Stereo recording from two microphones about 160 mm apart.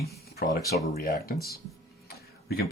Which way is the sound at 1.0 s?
70° left (ahead or behind).